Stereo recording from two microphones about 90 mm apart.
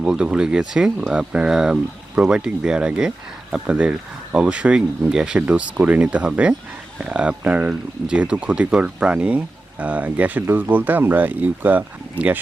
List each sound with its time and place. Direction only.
0.0 s speech: 10° right (ahead or behind)